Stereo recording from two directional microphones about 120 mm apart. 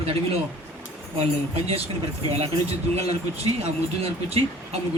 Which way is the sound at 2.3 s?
60° right (ahead or behind).